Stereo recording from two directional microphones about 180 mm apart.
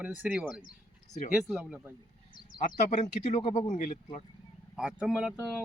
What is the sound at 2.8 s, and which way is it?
Speech, 40° left (ahead or behind).